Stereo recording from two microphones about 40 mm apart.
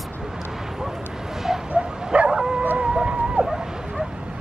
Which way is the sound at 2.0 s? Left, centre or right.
Right.